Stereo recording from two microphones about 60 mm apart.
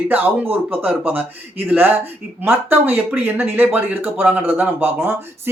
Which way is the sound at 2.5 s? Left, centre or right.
Right.